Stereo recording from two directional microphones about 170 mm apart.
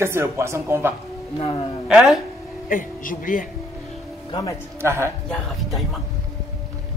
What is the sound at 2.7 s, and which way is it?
Speech, 50° left (ahead or behind).